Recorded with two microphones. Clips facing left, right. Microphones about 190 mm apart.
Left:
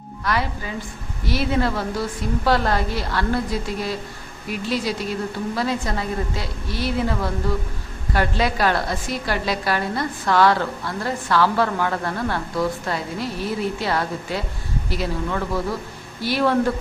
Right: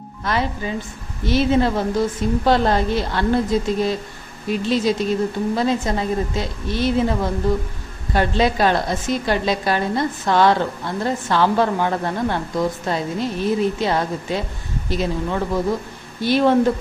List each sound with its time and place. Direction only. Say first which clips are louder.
0.3 s a woman's voice: right 3 dB; 25° right (ahead or behind)